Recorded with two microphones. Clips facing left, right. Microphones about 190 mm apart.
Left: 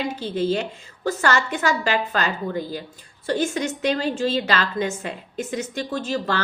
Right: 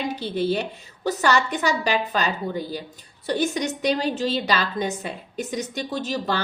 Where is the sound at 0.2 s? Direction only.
15° right (ahead or behind).